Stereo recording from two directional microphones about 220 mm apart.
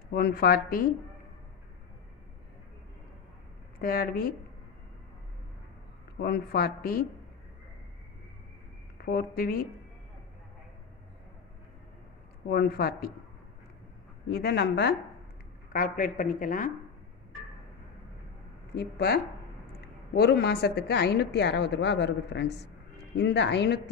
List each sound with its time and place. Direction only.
0.1 s a woman's voice: 45° left (ahead or behind)
3.8 s a woman's voice: 45° left (ahead or behind)
6.2 s a woman's voice: 45° left (ahead or behind)
9.0 s a woman's voice: 40° left (ahead or behind)
12.4 s a woman's voice: 45° left (ahead or behind)
14.2 s a woman's voice: 45° left (ahead or behind)
15.7 s a woman's voice: 40° left (ahead or behind)
18.8 s a woman's voice: 45° left (ahead or behind)